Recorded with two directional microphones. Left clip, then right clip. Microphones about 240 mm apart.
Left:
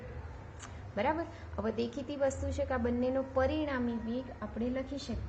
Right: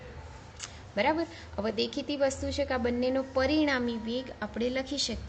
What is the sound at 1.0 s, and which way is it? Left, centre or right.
A woman's voice, right.